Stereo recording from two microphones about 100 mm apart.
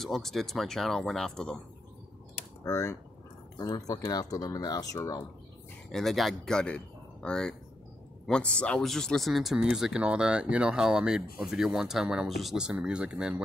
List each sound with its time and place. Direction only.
0.0 s speech: 5° left (ahead or behind)
2.6 s speech: 30° left (ahead or behind)
3.5 s speech: 40° left (ahead or behind)
5.9 s speech: 5° left (ahead or behind)